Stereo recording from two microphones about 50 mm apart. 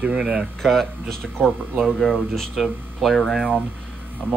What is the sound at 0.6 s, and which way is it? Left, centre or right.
Speech, centre.